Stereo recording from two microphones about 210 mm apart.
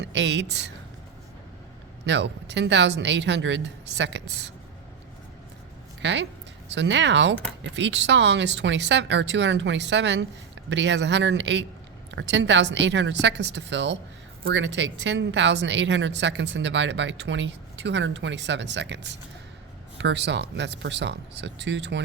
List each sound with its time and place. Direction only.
0.0 s speech: 55° right (ahead or behind)
2.0 s speech: 55° right (ahead or behind)
6.0 s speech: 60° right (ahead or behind)